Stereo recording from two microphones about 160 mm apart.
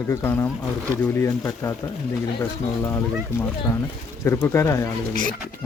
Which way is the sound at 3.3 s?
15° left (ahead or behind).